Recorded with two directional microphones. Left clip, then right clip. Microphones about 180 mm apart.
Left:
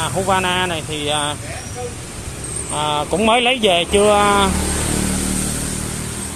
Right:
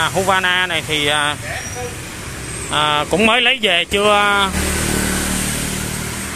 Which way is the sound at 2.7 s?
35° right (ahead or behind).